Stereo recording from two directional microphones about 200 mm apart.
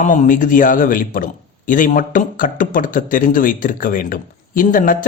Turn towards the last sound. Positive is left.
turn(degrees=40)  # may be behind; listen again after turning